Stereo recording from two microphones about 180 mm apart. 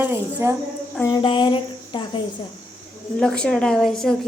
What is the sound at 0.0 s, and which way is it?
Speech, 10° right (ahead or behind).